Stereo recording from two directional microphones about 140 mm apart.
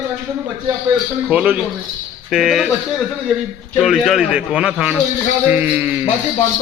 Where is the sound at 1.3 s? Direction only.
10° right (ahead or behind).